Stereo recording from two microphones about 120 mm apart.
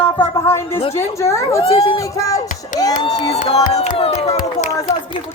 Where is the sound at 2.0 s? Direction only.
25° left (ahead or behind).